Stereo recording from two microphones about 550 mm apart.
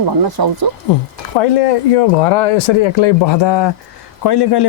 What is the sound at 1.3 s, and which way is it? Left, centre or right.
Speech, left.